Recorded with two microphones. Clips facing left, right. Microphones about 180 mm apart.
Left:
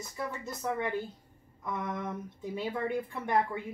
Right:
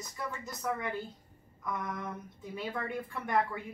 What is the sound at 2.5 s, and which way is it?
Speech, 25° left (ahead or behind).